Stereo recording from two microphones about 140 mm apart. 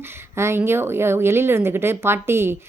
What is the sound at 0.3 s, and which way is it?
Speech, 20° right (ahead or behind).